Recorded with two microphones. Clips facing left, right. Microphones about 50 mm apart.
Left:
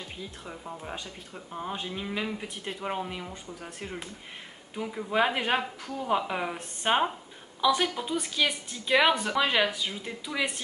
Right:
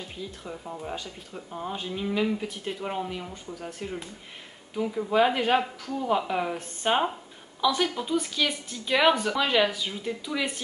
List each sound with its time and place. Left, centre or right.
0.5 s speech: centre